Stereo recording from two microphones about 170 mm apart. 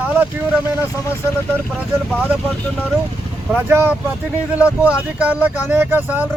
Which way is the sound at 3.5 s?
15° right (ahead or behind).